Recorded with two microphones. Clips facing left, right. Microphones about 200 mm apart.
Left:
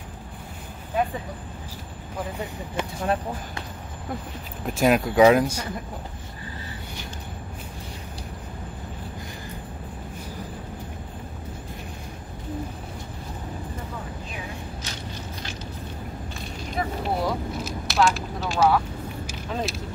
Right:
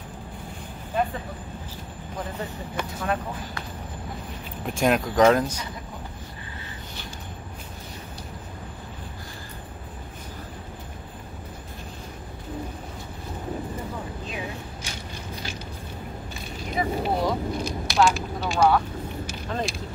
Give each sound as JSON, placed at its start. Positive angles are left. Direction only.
{"t": 2.7, "sound": "speech", "side_deg": 25}
{"t": 4.6, "sound": "speech", "side_deg": 5}
{"t": 16.7, "sound": "vehicle", "side_deg": 0}